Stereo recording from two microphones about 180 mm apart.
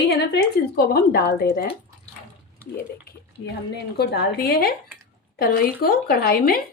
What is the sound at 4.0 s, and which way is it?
A woman's voice, 65° left (ahead or behind).